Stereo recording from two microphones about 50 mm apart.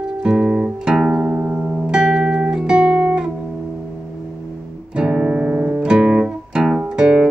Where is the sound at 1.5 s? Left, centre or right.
Centre.